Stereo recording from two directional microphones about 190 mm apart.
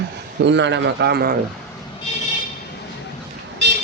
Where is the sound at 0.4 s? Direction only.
70° right (ahead or behind).